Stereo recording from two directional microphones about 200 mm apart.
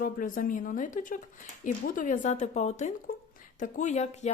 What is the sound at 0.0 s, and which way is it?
Speech, 40° left (ahead or behind).